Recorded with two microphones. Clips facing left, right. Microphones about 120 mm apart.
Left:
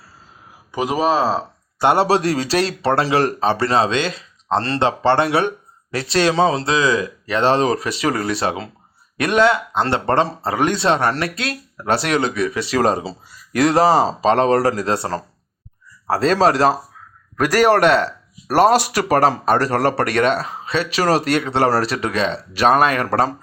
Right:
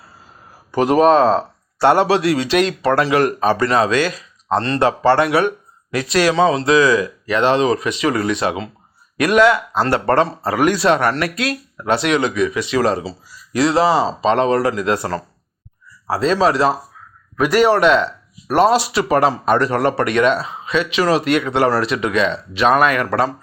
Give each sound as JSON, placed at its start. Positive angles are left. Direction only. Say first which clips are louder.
{"t": 0.7, "sound": "speech", "louder": "right 6 dB", "side_deg": 5}
{"t": 2.0, "sound": "speech", "louder": "right 1 dB", "side_deg": 40}
{"t": 16.0, "sound": "speech", "louder": "even", "side_deg": 45}